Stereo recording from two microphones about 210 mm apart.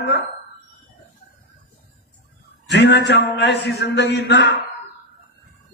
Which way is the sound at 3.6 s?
50° left (ahead or behind).